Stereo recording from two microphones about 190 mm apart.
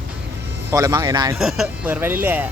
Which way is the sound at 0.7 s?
20° right (ahead or behind).